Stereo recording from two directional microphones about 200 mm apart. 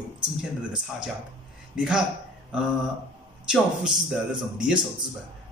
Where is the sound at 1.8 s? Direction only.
5° right (ahead or behind).